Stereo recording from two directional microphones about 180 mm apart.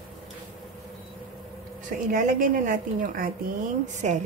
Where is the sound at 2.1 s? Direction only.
50° right (ahead or behind).